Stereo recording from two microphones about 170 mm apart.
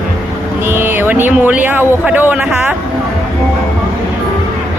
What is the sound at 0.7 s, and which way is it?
Speech, 10° right (ahead or behind).